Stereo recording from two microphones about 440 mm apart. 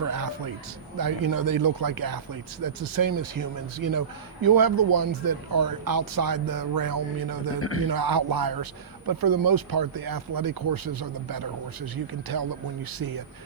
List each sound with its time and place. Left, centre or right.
0.0 s a man's voice: right
7.6 s a man's voice: left
7.9 s speech: right